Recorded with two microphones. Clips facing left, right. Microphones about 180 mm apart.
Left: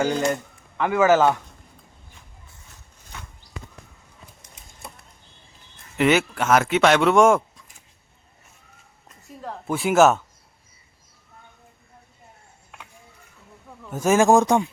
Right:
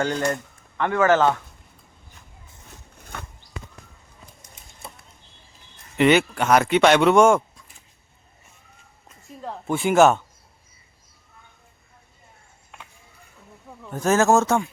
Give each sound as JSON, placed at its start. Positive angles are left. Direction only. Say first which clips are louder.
{"t": 0.0, "sound": "speech", "louder": "left 2 dB", "side_deg": 5}
{"t": 3.0, "sound": "a sound", "louder": "right 4 dB", "side_deg": -55}
{"t": 6.0, "sound": "speech", "louder": "right 2 dB", "side_deg": 0}
{"t": 9.0, "sound": "speech", "louder": "right 1 dB", "side_deg": 0}
{"t": 12.7, "sound": "a sound", "louder": "even", "side_deg": 0}
{"t": 13.9, "sound": "speech", "louder": "left 2 dB", "side_deg": 10}